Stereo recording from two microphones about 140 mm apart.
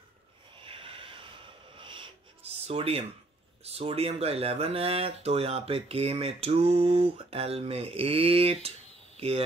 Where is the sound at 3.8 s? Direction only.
45° right (ahead or behind).